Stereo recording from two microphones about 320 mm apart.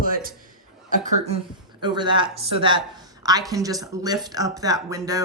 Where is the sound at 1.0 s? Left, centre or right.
Centre.